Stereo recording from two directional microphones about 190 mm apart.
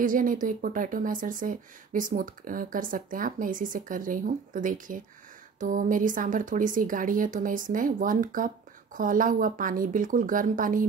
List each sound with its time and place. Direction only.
0.0 s speech: 45° right (ahead or behind)